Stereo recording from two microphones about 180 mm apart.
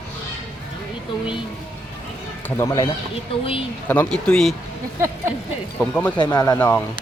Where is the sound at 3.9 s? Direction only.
5° left (ahead or behind).